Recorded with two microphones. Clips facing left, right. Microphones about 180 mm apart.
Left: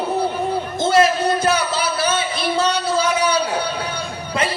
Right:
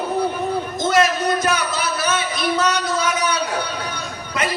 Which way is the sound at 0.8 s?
30° left (ahead or behind).